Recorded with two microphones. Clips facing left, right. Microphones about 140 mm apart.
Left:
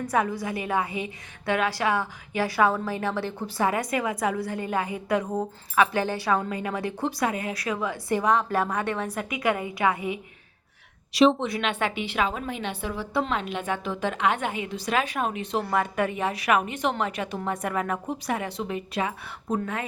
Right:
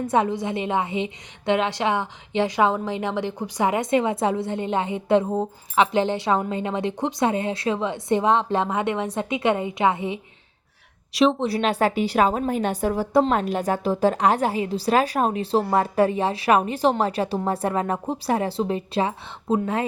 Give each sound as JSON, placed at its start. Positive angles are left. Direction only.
{"t": 0.0, "sound": "a woman's voice", "side_deg": -25}
{"t": 11.1, "sound": "speech", "side_deg": 0}
{"t": 11.4, "sound": "a woman's voice", "side_deg": -35}